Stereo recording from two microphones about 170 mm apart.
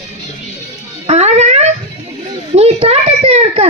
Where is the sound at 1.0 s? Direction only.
40° right (ahead or behind).